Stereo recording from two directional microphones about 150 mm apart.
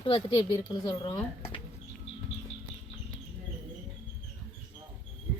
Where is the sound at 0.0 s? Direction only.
35° left (ahead or behind).